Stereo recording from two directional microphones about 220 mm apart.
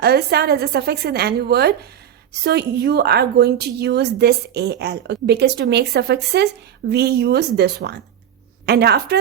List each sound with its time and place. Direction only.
0.0 s a woman's voice: 45° right (ahead or behind)